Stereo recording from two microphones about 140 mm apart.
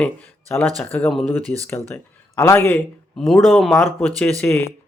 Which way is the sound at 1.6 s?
15° left (ahead or behind).